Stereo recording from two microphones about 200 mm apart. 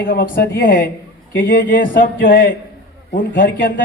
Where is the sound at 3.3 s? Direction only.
40° left (ahead or behind).